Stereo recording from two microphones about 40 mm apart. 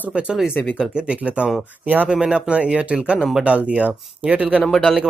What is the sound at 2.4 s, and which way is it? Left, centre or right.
Speech, right.